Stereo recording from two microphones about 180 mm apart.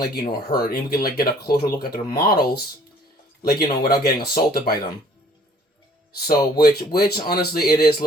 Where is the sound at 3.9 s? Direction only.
55° left (ahead or behind).